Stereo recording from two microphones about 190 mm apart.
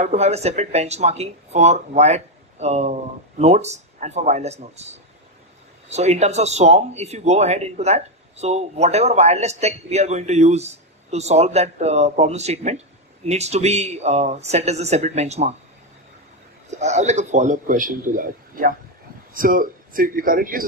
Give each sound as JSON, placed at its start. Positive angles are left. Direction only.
{"t": 0.0, "sound": "speech", "side_deg": -35}
{"t": 16.7, "sound": "a man's voice", "side_deg": -35}